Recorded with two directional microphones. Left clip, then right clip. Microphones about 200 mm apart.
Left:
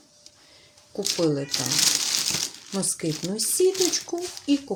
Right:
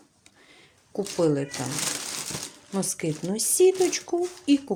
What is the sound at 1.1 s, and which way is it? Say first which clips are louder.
Speech: right 1 dB; 10° right (ahead or behind).